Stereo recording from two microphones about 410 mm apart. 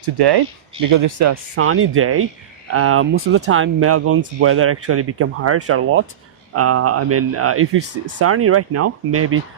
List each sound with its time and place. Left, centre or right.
0.0 s speech: right
0.9 s speech: right